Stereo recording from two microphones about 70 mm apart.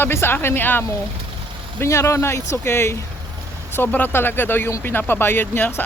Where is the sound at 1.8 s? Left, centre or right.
Left.